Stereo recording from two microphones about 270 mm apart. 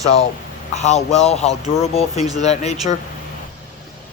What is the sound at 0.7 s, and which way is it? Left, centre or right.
Speech, left.